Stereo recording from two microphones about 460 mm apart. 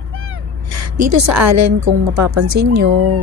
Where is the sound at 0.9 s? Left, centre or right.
Right.